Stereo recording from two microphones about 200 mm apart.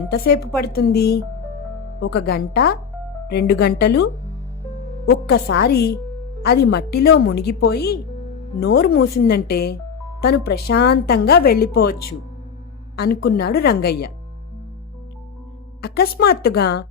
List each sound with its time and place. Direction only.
0.1 s a woman's voice: 50° left (ahead or behind)
15.8 s a woman's voice: 50° left (ahead or behind)